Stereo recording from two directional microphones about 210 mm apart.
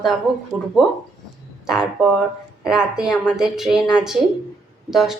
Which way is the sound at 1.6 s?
Centre (ahead or behind).